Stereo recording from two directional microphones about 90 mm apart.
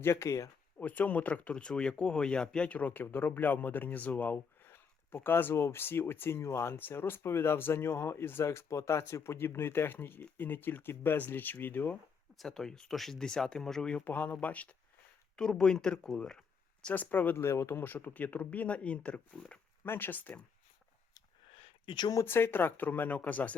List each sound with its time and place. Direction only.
0.0 s speech: 30° left (ahead or behind)
0.8 s speech: 15° left (ahead or behind)
12.4 s speech: 5° left (ahead or behind)
16.8 s speech: 20° left (ahead or behind)
19.8 s speech: 25° left (ahead or behind)
21.4 s a sound: 75° left (ahead or behind); by 22.1 s 60° left (ahead or behind)
22.1 s speech: 30° left (ahead or behind)